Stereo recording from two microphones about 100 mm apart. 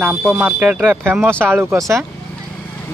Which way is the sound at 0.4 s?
15° right (ahead or behind).